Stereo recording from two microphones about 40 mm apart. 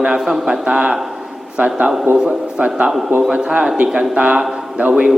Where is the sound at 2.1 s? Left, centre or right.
Right.